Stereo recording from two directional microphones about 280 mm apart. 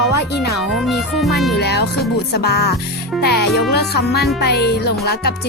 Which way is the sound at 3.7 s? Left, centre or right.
Left.